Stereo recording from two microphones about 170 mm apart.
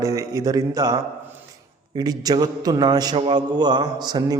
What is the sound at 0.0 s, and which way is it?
A man's voice, 20° right (ahead or behind).